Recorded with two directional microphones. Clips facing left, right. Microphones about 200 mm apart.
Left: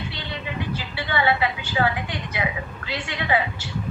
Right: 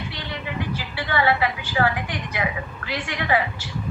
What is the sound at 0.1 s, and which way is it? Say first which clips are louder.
A woman's voice: right 1 dB; 25° left (ahead or behind).